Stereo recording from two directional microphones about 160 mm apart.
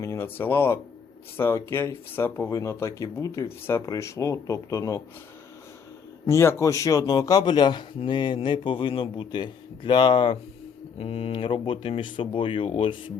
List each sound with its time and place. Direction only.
0.0 s speech: 15° left (ahead or behind)
6.2 s a man's voice: 15° left (ahead or behind)